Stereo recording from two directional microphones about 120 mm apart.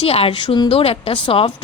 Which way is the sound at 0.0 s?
55° left (ahead or behind).